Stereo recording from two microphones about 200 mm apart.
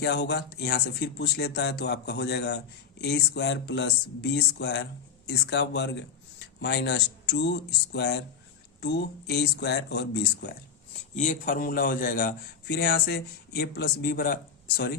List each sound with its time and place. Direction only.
0.0 s speech: 55° left (ahead or behind)
11.2 s a man's voice: 40° left (ahead or behind)